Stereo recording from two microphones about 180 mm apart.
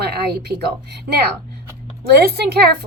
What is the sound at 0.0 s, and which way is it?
A woman's voice, 65° right (ahead or behind).